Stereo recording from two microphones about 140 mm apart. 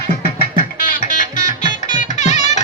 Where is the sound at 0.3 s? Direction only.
90° left.